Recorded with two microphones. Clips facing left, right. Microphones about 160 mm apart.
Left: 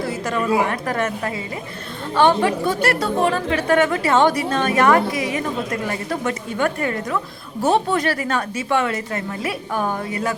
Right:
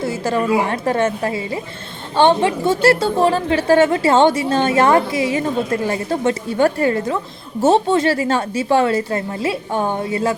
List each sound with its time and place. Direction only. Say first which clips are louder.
0.0 s a woman's voice: right 3 dB; 30° right (ahead or behind)